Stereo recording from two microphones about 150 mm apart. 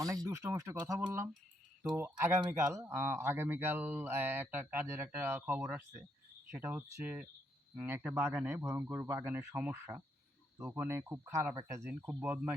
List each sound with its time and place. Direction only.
0.3 s speech: 20° right (ahead or behind)